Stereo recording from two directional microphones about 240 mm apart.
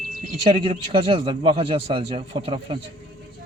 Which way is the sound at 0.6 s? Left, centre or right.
Right.